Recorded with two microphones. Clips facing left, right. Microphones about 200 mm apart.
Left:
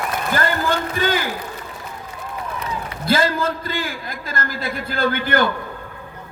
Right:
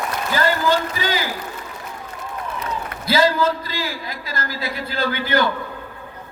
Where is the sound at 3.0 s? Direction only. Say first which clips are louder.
Right 2 dB; 50° left (ahead or behind).